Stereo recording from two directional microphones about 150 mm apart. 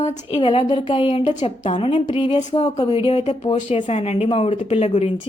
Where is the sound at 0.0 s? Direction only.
45° left (ahead or behind).